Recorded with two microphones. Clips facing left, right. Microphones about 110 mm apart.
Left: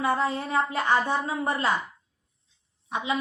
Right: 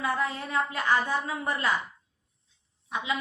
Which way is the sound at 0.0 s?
30° left (ahead or behind).